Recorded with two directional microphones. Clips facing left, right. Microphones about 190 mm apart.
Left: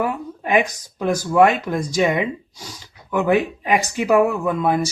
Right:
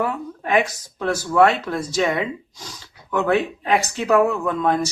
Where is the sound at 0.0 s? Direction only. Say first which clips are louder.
Left 1 dB; 15° left (ahead or behind).